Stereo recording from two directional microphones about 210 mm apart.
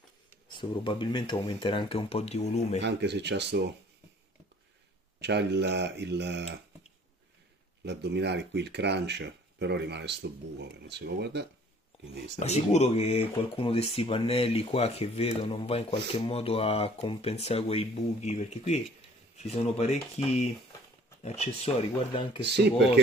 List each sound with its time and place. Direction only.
0.5 s speech: 20° left (ahead or behind)
2.8 s speech: 55° right (ahead or behind)
5.2 s speech: 55° right (ahead or behind)
7.8 s speech: 55° right (ahead or behind)
12.4 s speech: 30° left (ahead or behind)